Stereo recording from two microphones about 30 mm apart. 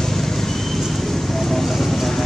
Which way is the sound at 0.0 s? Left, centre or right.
Centre.